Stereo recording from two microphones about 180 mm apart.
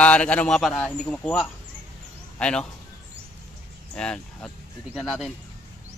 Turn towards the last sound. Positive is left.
turn(degrees=5)  # may be behind; listen again after turning